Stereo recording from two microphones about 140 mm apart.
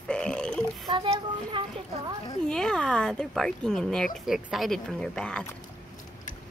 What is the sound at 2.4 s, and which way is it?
Speech, 5° left (ahead or behind).